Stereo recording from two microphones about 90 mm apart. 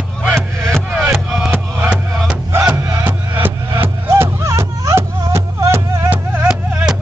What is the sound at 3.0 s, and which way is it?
Music, 25° right (ahead or behind).